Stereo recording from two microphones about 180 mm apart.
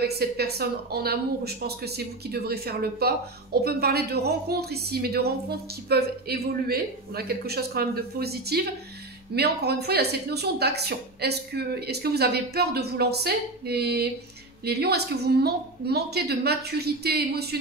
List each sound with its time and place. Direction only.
0.0 s a woman's voice: 60° right (ahead or behind)